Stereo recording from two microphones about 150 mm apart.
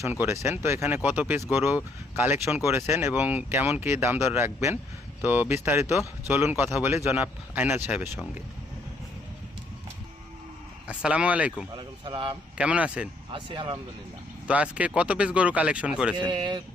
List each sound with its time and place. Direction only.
0.0 s speech: 15° right (ahead or behind)
10.8 s speech: 5° right (ahead or behind)
11.7 s speech: 30° right (ahead or behind)
12.5 s speech: 10° right (ahead or behind)
13.3 s speech: 35° right (ahead or behind)
14.4 s speech: 10° right (ahead or behind)
16.1 s speech: 30° right (ahead or behind)